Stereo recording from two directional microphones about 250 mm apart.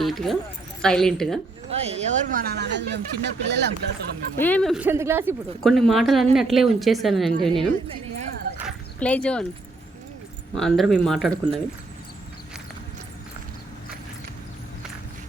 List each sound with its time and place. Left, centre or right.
0.0 s a woman's voice: centre
1.7 s speech: right
4.4 s speech: centre
5.6 s a woman's voice: centre
8.6 s dog: centre
10.5 s a woman's voice: centre